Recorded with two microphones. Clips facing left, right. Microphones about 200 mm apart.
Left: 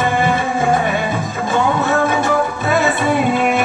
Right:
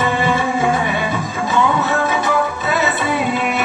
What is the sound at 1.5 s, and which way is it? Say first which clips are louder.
Music: left 1 dB; 50° left (ahead or behind).